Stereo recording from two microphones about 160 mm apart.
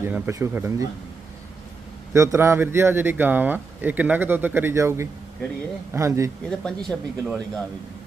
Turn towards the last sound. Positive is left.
turn(degrees=0)  # may be behind; listen again after turning